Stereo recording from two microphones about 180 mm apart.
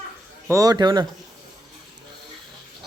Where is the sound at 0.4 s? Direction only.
20° right (ahead or behind).